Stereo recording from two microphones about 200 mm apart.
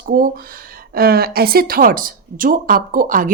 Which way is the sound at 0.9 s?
50° right (ahead or behind).